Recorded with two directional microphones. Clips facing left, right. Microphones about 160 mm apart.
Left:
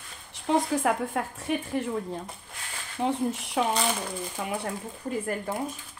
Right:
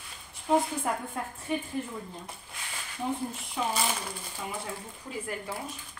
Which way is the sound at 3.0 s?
70° left (ahead or behind).